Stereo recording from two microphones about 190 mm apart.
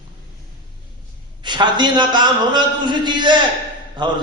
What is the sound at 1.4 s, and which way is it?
A man's voice, 25° right (ahead or behind).